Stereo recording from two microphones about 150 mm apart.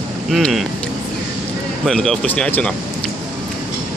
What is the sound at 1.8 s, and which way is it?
Speech, centre (ahead or behind).